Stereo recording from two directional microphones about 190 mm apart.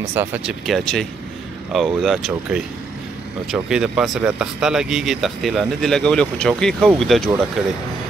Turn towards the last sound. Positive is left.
turn(degrees=0)  # may be behind; listen again after turning